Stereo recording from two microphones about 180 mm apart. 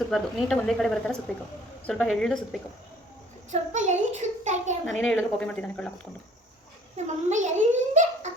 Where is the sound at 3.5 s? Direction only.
40° right (ahead or behind).